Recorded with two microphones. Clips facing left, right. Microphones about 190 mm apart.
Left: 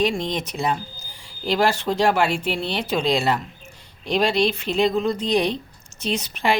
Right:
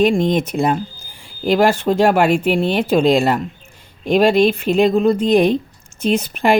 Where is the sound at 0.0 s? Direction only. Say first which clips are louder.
Right 8 dB; 50° right (ahead or behind).